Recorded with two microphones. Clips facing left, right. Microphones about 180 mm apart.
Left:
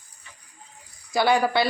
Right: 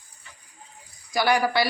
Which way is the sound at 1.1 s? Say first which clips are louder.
Left 1 dB; 25° left (ahead or behind).